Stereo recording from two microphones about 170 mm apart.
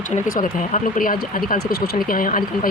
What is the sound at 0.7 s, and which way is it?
Speech, 55° left (ahead or behind).